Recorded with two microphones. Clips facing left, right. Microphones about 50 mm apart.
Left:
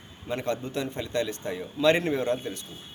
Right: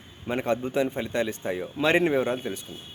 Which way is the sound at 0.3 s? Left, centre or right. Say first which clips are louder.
Right 3 dB; right.